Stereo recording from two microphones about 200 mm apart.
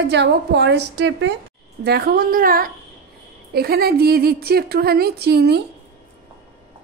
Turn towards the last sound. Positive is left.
turn(degrees=-55)  # may be behind; listen again after turning